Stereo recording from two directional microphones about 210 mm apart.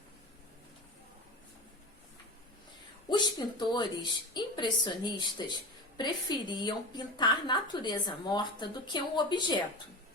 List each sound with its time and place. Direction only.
3.1 s a woman's voice: 20° left (ahead or behind)